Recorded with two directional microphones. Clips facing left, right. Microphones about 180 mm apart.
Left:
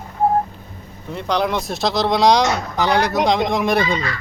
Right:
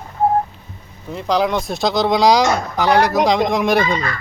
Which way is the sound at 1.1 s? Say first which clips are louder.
Right 2 dB; centre (ahead or behind).